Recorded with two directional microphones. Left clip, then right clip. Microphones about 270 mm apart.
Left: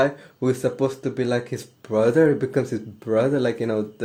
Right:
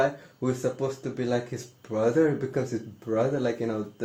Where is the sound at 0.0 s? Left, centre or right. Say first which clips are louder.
Left 5 dB; left.